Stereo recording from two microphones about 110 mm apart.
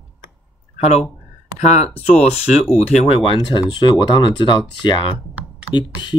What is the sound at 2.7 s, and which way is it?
Speech, 65° left (ahead or behind).